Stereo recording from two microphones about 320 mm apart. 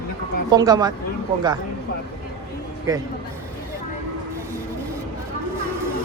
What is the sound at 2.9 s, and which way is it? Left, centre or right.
Speech, centre.